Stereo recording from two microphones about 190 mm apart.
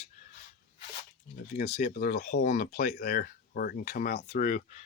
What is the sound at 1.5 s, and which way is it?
Speech, 40° left (ahead or behind).